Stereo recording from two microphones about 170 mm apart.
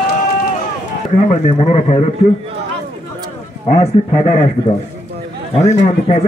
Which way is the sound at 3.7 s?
45° left (ahead or behind).